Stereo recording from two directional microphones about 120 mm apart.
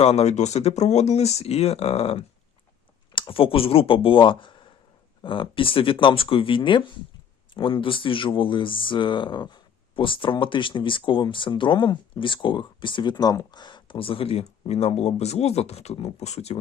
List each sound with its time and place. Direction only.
0.0 s speech: 60° left (ahead or behind)
3.1 s speech: 45° left (ahead or behind); by 16.6 s 65° left (ahead or behind)